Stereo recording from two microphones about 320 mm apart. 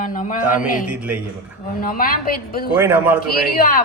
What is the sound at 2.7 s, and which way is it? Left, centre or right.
Speech, centre.